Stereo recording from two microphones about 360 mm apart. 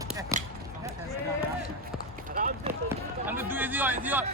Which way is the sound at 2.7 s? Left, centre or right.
Centre.